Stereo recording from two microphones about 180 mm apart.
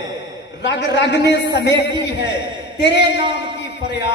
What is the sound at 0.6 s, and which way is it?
A man's voice, 80° left.